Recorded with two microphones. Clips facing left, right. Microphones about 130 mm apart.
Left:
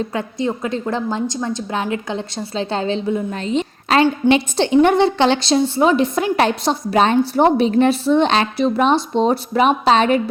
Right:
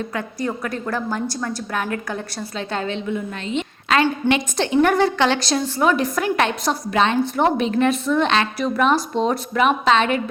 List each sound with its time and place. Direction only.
0.0 s a woman's voice: 25° left (ahead or behind)